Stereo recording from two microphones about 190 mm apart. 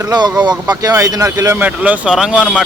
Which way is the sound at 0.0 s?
20° right (ahead or behind).